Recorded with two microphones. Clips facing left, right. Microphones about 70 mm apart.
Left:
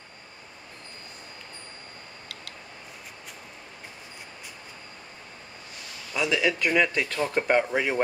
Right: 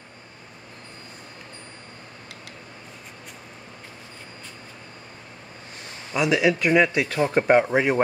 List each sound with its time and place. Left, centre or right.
6.1 s speech: centre
7.2 s speech: right